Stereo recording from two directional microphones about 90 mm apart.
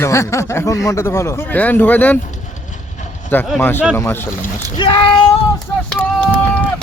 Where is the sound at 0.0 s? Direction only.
30° left (ahead or behind).